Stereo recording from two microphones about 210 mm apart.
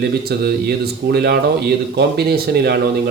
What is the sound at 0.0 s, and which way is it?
Speech, 45° right (ahead or behind).